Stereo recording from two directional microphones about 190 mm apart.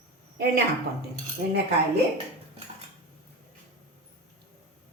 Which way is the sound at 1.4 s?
60° right (ahead or behind).